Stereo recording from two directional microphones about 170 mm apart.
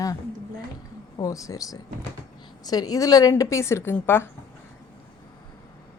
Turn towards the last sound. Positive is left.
turn(degrees=15)  # may be behind; listen again after turning